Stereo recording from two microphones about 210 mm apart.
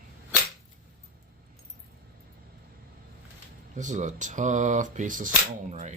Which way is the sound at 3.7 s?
35° right (ahead or behind).